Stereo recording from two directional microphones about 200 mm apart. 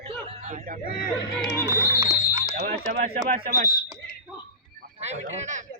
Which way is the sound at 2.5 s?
40° right (ahead or behind).